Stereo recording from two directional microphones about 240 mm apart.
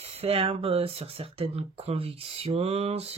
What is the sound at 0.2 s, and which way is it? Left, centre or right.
Speech, right.